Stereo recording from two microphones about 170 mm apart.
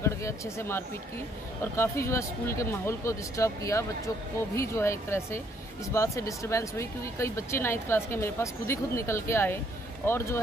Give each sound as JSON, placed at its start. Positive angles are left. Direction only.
{"t": 0.0, "sound": "speech", "side_deg": 15}